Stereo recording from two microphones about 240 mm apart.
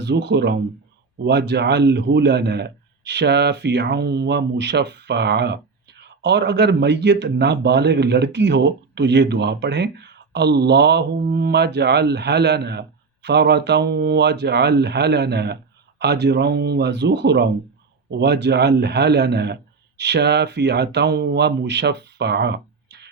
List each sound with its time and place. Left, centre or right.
0.0 s a man's voice: right